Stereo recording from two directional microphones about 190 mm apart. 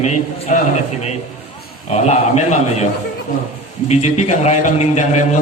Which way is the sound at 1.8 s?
35° left (ahead or behind).